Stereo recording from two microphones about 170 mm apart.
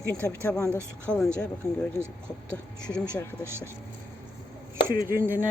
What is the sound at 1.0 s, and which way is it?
Speech, 5° left (ahead or behind).